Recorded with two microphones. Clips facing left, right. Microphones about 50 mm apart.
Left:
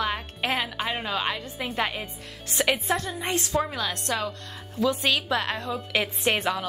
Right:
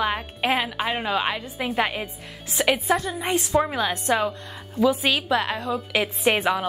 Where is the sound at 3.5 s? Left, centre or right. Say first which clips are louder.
Right 7 dB; right.